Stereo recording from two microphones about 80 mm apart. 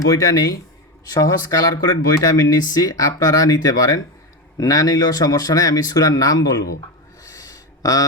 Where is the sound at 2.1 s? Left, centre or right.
Left.